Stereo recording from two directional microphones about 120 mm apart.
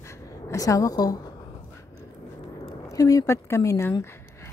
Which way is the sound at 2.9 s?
30° left (ahead or behind).